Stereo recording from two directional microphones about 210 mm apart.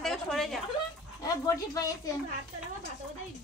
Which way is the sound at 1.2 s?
15° left (ahead or behind).